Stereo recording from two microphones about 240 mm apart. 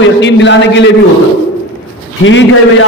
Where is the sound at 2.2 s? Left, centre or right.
Left.